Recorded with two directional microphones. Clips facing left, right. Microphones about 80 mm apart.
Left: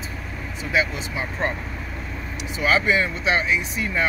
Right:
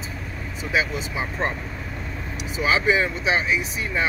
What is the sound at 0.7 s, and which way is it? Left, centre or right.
Speech, centre.